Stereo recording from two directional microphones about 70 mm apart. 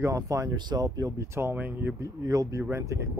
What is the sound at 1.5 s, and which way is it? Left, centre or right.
Speech, right.